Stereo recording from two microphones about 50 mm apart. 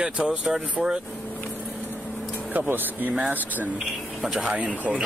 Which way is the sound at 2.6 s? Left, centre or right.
Right.